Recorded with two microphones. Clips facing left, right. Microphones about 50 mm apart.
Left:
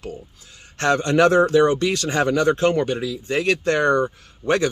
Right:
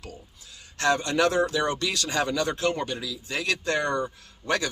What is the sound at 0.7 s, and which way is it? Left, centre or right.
Speech, left.